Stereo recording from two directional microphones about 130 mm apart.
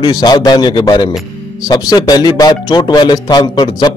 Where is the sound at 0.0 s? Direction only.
35° left (ahead or behind).